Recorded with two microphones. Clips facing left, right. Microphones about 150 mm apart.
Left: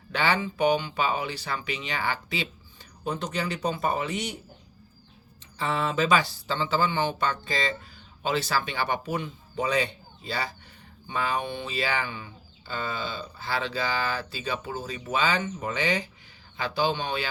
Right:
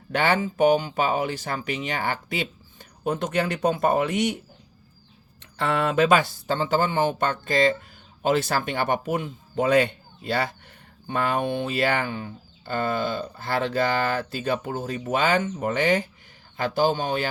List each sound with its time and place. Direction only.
0.1 s speech: 50° right (ahead or behind)
5.5 s speech: 60° right (ahead or behind); by 17.2 s 45° right (ahead or behind)